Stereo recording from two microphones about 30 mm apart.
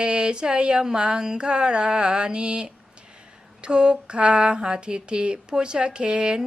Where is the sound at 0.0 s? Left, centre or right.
Right.